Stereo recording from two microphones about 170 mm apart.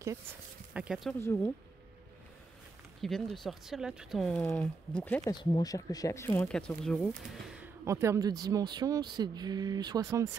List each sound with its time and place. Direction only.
0.7 s speech: 5° right (ahead or behind)
1.2 s speech: 15° left (ahead or behind)
3.0 s speech: centre (ahead or behind)
5.2 s speech: 25° left (ahead or behind); by 7.1 s 5° left (ahead or behind)
7.6 s speech: 15° right (ahead or behind)